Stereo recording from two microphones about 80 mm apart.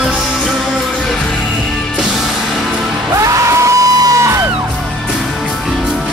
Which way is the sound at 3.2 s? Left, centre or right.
Right.